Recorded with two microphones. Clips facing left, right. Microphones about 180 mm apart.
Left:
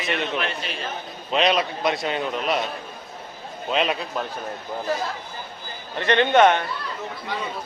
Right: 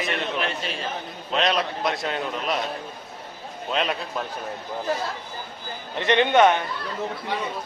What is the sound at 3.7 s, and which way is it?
Speech, 5° left (ahead or behind).